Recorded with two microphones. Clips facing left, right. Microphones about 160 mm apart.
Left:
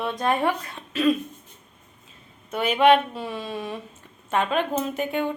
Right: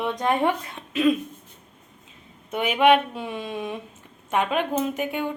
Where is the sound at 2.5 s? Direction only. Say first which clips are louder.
Even; 15° right (ahead or behind).